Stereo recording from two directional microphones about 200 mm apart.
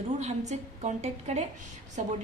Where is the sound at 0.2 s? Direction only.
35° right (ahead or behind).